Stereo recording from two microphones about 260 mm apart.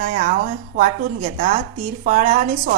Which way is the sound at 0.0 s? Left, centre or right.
Right.